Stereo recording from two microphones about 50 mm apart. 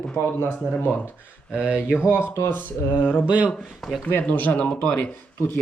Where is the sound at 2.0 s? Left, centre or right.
Left.